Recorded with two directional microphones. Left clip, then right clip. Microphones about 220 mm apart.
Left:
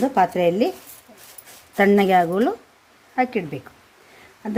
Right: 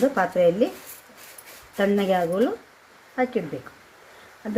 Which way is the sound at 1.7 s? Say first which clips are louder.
Left 6 dB; 50° left (ahead or behind).